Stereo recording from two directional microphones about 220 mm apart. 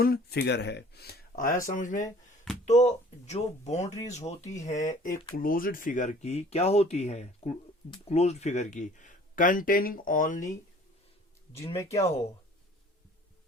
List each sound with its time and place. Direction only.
0.0 s speech: 45° left (ahead or behind)
3.8 s speech: 15° left (ahead or behind)
4.6 s speech: 35° left (ahead or behind)
11.7 s speech: 15° left (ahead or behind)